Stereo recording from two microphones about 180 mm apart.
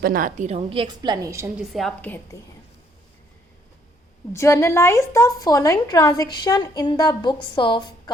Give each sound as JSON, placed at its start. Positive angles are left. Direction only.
{"t": 0.0, "sound": "a woman's voice", "side_deg": -50}
{"t": 1.5, "sound": "a woman's voice", "side_deg": 0}
{"t": 4.3, "sound": "a woman's voice", "side_deg": 15}